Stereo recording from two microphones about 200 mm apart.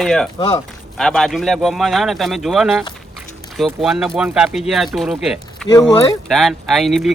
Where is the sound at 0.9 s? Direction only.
Centre (ahead or behind).